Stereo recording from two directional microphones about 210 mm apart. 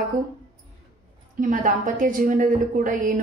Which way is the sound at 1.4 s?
40° right (ahead or behind).